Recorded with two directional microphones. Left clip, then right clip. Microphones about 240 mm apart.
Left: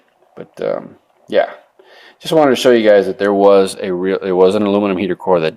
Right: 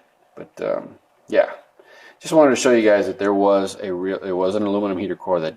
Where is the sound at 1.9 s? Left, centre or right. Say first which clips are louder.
Left 6 dB; left.